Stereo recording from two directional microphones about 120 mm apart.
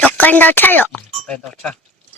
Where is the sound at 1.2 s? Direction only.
5° left (ahead or behind).